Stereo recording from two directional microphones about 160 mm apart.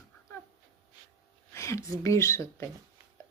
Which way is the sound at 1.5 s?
20° left (ahead or behind).